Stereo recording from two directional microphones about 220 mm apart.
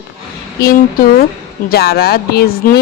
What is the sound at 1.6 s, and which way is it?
Speech, 45° left (ahead or behind).